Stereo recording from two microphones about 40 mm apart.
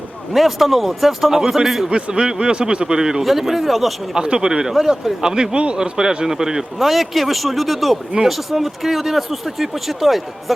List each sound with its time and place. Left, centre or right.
0.3 s speech: centre
1.9 s a man's voice: right; by 3.9 s centre
4.1 s a man's voice: right
6.7 s speech: centre